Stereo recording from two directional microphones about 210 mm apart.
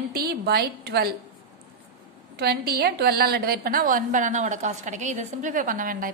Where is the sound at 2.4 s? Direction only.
50° right (ahead or behind).